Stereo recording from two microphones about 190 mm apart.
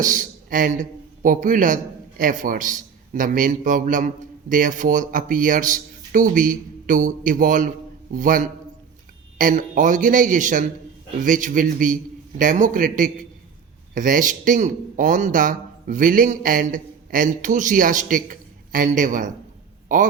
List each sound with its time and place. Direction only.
0.0 s a man's voice: 45° right (ahead or behind)